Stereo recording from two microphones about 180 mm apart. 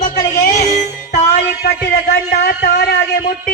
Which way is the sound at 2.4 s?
60° left (ahead or behind).